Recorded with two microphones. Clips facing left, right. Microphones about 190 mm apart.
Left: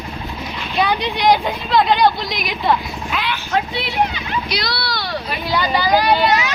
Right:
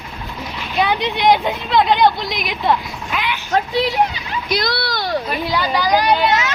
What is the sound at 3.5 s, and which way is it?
A child's voice, 40° right (ahead or behind).